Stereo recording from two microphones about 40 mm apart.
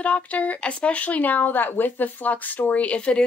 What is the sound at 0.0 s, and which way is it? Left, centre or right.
Speech, left.